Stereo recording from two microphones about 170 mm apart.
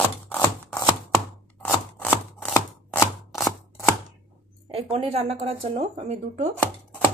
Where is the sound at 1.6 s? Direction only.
10° left (ahead or behind).